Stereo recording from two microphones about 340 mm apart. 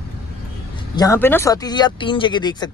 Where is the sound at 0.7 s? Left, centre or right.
Centre.